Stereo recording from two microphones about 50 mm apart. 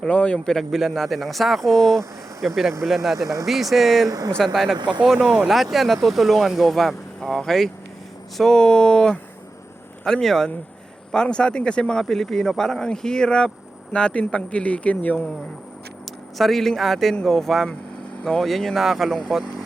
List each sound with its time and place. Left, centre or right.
0.1 s speech: left
0.4 s speech: centre; by 15.3 s left
16.4 s speech: centre